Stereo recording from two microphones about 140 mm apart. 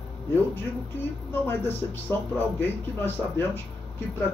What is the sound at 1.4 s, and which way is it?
Speech, 15° left (ahead or behind).